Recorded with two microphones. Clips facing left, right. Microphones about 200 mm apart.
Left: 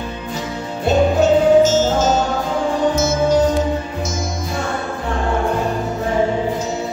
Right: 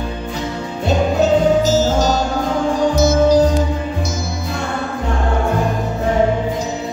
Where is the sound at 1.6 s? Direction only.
35° right (ahead or behind).